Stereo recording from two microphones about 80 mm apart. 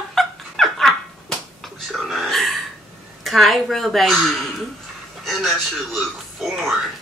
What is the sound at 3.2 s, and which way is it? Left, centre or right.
A woman's voice, centre.